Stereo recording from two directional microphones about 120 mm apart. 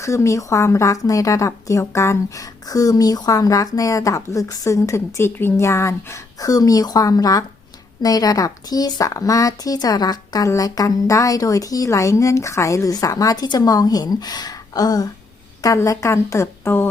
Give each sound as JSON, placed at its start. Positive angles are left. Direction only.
{"t": 0.0, "sound": "speech", "side_deg": 25}